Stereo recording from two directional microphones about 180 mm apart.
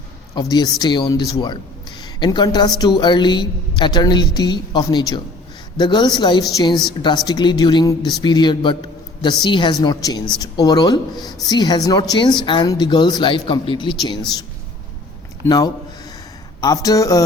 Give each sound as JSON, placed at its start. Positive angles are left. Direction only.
{"t": 0.5, "sound": "speech", "side_deg": 25}
{"t": 15.4, "sound": "speech", "side_deg": 20}